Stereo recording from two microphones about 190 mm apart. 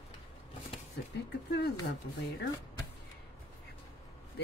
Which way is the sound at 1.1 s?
55° left (ahead or behind).